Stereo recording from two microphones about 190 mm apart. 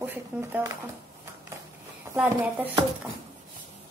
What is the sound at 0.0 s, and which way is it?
Speech, 10° right (ahead or behind).